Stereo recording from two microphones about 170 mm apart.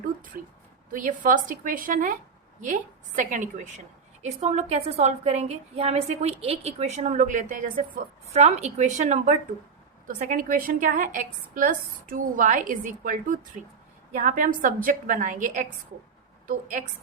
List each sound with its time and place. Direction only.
0.9 s a woman's voice: 50° right (ahead or behind)